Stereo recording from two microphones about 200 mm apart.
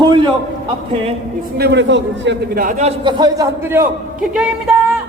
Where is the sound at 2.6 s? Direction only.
35° right (ahead or behind).